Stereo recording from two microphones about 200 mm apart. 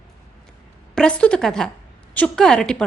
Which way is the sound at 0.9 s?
5° left (ahead or behind).